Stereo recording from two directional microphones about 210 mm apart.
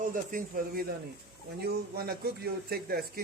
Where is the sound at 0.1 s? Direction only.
40° right (ahead or behind).